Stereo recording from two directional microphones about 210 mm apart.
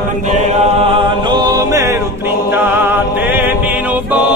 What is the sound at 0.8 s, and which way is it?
Music, 25° right (ahead or behind).